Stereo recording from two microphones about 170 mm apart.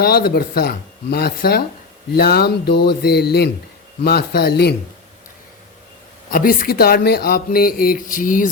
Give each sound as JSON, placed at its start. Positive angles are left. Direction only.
{"t": 0.0, "sound": "speech", "side_deg": 65}
{"t": 6.3, "sound": "speech", "side_deg": 55}